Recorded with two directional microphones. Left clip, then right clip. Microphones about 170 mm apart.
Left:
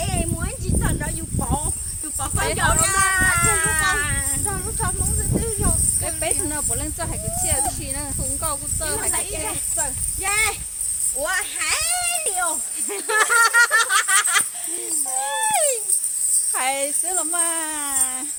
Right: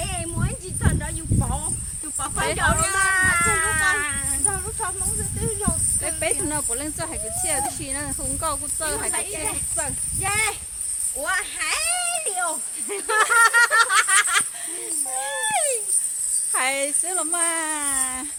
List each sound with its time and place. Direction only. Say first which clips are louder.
0.0 s a sound: left 3 dB; 15° left (ahead or behind)
2.1 s speech: left 1 dB; 10° left (ahead or behind)
2.6 s speech: left 2 dB; 25° left (ahead or behind)
4.4 s speech: left 1 dB; 25° left (ahead or behind)
5.4 s a sound: left 1 dB; 20° left (ahead or behind)
6.1 s a child's voice: even; 25° right (ahead or behind)
9.1 s speech: left 1 dB; 25° left (ahead or behind)
11.2 s a sound: left 1 dB; 10° left (ahead or behind)
16.5 s a child's voice: right 2 dB; 25° right (ahead or behind)